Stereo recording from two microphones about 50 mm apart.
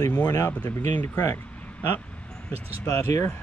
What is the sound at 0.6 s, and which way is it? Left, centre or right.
Speech, left.